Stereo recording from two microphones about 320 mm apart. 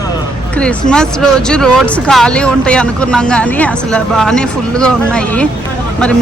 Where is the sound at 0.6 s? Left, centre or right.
Centre.